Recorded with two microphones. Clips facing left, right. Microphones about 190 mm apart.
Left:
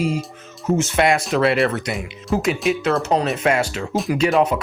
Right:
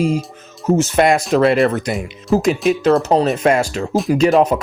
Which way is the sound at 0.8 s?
40° right (ahead or behind).